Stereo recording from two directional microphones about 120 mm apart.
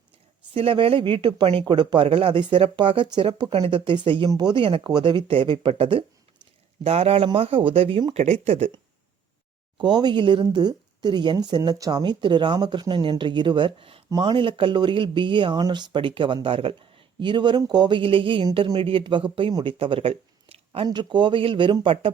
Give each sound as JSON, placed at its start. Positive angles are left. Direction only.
{"t": 0.5, "sound": "speech", "side_deg": -50}
{"t": 9.7, "sound": "speech", "side_deg": -35}
{"t": 20.8, "sound": "speech", "side_deg": -40}